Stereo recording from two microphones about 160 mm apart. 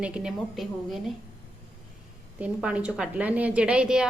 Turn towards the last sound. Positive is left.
turn(degrees=-5)  # may be behind; listen again after turning